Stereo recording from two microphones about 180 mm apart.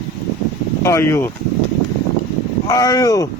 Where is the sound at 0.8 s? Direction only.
15° left (ahead or behind).